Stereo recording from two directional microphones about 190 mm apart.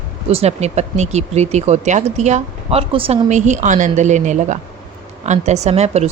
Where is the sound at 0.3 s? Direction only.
35° right (ahead or behind).